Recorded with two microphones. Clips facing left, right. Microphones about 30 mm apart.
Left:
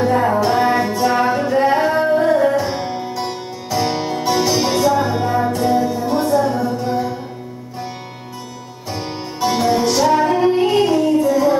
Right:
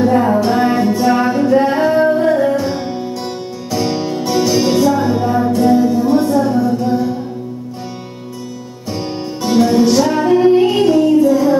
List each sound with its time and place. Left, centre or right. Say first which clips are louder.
0.0 s music: right 3 dB; centre
8.9 s music: right 4 dB; centre